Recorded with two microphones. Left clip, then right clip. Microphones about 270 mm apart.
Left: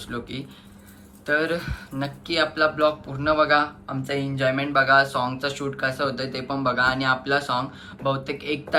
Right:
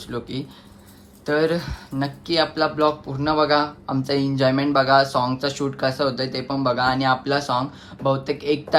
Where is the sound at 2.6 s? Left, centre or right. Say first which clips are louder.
Left 2 dB; centre.